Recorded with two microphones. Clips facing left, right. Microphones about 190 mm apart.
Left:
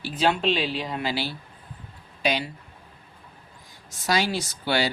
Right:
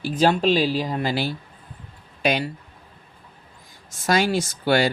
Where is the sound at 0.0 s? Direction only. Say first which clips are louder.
Right 4 dB; 45° right (ahead or behind).